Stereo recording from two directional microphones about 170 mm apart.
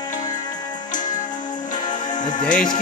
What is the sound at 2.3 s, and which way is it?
Music, 50° left (ahead or behind).